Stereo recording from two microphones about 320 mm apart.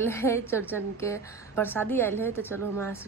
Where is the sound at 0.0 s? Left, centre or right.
Centre.